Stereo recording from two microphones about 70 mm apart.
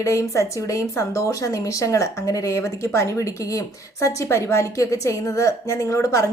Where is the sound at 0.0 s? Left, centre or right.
Left.